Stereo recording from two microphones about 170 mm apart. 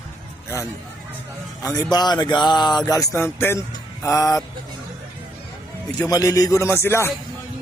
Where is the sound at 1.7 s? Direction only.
25° left (ahead or behind).